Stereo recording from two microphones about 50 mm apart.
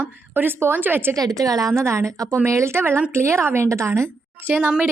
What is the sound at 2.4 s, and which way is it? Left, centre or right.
A woman's voice, right.